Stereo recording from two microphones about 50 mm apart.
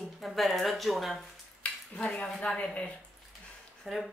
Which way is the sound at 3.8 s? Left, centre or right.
Centre.